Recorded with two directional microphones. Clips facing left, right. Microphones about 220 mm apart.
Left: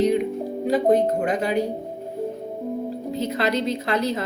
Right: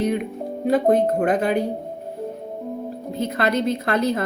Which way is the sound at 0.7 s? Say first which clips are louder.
Right 1 dB; 55° right (ahead or behind).